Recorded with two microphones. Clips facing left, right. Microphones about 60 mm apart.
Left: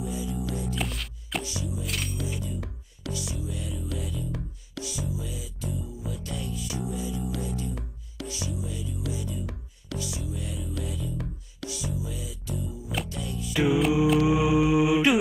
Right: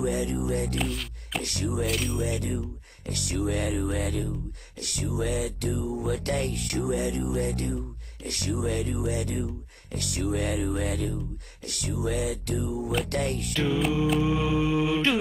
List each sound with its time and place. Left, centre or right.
0.0 s music: right
0.7 s music: centre
1.4 s music: right
1.9 s music: centre
2.2 s music: right
13.5 s a capella: centre